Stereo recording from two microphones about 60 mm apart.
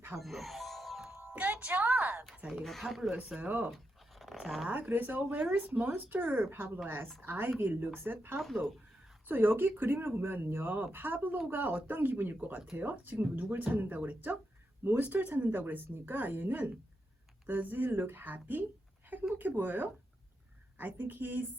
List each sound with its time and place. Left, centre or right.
0.2 s music: centre
1.2 s music: right
1.5 s speech: right
2.5 s speech: centre
3.2 s speech: centre
4.2 s speech: centre
4.7 s speech: right